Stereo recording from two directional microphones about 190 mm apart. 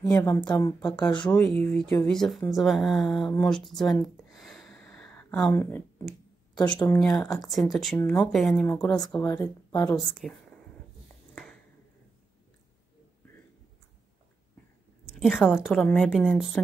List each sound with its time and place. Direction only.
0.0 s a woman's voice: 15° left (ahead or behind)
1.3 s speech: 10° left (ahead or behind)
4.4 s a sound: centre (ahead or behind)
6.6 s speech: 5° left (ahead or behind)
9.2 s a woman's voice: 20° left (ahead or behind)
10.2 s speech: centre (ahead or behind)
15.0 s a woman's voice: centre (ahead or behind)